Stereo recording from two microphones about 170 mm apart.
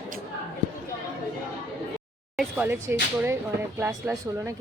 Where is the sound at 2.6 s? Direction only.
10° right (ahead or behind).